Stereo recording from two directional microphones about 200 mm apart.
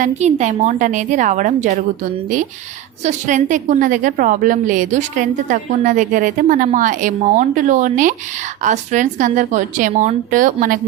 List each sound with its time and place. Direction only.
0.0 s a woman's voice: 35° right (ahead or behind)
3.0 s a woman's voice: 35° right (ahead or behind)